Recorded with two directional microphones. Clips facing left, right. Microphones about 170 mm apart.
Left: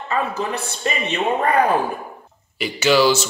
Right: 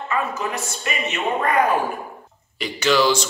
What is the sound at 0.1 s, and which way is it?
A man's voice, 30° left (ahead or behind).